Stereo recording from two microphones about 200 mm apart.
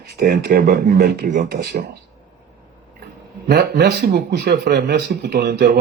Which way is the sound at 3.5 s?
55° right (ahead or behind).